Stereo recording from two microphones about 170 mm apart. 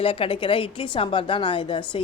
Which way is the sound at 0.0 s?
35° left (ahead or behind).